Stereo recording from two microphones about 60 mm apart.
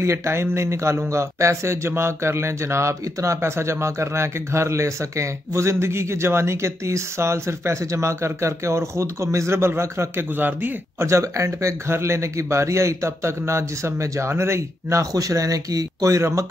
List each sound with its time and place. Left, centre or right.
0.0 s speech: right
10.3 s speech: right
11.0 s speech: right
15.0 s speech: right